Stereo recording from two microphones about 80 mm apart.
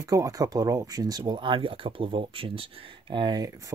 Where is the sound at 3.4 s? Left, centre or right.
Right.